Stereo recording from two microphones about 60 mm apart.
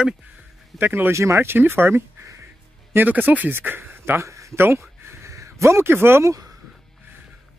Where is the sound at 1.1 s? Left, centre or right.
Right.